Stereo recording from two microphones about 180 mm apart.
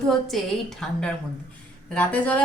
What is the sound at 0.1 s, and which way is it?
A woman's voice, centre (ahead or behind).